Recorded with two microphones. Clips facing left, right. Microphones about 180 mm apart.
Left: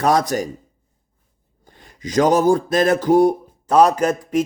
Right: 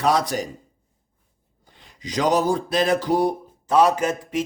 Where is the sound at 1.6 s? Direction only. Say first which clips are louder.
Left 5 dB; 50° left (ahead or behind).